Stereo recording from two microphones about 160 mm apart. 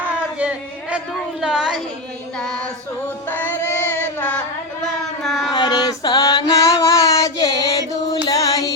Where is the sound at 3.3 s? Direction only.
15° left (ahead or behind).